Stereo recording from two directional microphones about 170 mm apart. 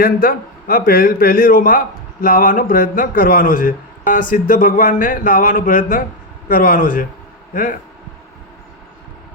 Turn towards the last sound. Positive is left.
turn(degrees=55)  # may be behind; listen again after turning